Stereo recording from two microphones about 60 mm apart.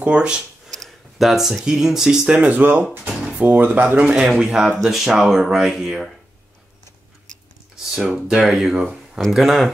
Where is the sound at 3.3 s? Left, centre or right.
Right.